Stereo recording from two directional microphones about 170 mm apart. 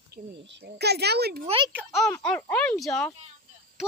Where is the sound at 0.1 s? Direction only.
80° right.